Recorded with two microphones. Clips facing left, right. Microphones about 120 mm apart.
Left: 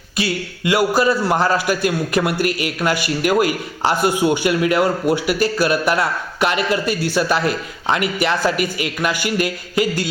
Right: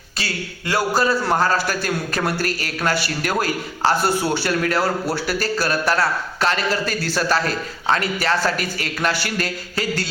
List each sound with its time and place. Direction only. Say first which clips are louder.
0.2 s a man's voice: left 7 dB; 15° left (ahead or behind)